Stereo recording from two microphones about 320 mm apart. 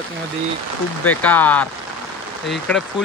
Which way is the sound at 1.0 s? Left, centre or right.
Centre.